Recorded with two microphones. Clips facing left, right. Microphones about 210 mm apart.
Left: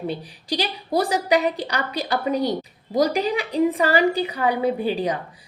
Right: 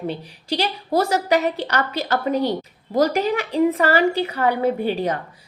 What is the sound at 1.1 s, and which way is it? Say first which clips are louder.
A woman's voice: right 1 dB; 15° left (ahead or behind).